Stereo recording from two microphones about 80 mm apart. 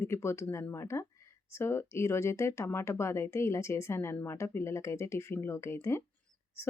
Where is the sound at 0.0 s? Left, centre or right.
Left.